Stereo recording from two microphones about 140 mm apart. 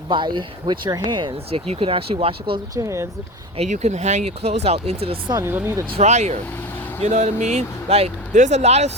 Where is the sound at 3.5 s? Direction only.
50° right (ahead or behind).